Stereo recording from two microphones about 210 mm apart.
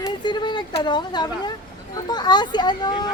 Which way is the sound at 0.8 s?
20° left (ahead or behind).